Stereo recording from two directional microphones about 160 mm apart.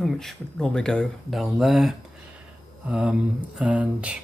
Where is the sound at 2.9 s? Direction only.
5° right (ahead or behind).